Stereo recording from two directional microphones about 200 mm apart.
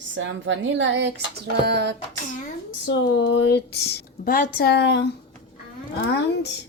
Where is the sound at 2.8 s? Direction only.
60° left (ahead or behind).